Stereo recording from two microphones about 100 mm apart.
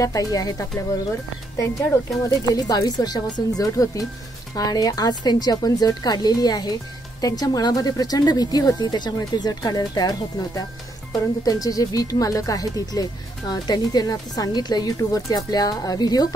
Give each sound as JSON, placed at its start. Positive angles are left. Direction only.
{"t": 0.0, "sound": "speech", "side_deg": 35}
{"t": 2.2, "sound": "speech", "side_deg": 40}